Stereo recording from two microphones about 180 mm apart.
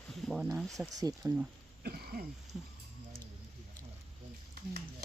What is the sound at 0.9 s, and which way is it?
Speech, 20° right (ahead or behind).